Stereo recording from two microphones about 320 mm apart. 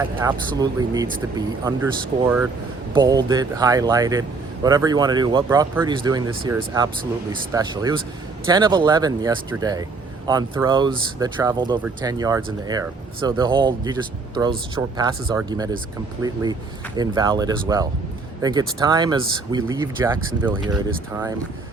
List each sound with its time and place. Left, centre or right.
0.0 s speech: centre